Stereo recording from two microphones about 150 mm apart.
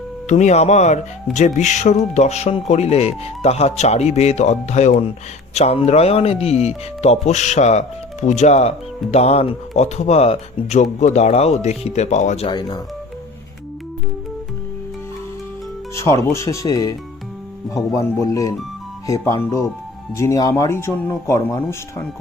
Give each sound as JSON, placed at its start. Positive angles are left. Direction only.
{"t": 0.3, "sound": "speech", "side_deg": 50}
{"t": 12.5, "sound": "speech", "side_deg": 30}
{"t": 16.0, "sound": "speech", "side_deg": 20}